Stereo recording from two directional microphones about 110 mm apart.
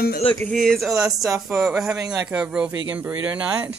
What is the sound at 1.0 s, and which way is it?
Speech, 30° right (ahead or behind).